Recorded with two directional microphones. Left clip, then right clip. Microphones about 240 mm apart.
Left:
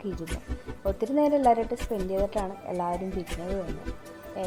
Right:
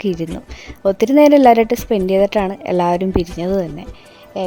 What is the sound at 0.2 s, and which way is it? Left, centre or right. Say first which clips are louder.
Speech: right 11 dB; right.